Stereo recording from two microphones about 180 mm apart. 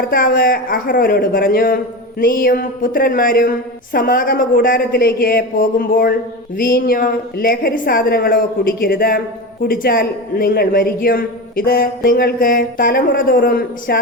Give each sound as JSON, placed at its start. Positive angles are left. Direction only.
{"t": 0.1, "sound": "a man's voice", "side_deg": 55}